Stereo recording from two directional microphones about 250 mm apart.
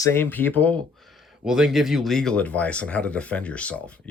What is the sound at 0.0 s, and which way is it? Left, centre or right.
Speech, centre.